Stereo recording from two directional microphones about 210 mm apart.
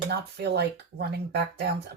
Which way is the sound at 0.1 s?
50° right (ahead or behind).